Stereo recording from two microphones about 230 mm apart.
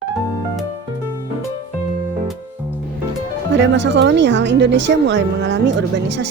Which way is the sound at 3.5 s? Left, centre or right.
Right.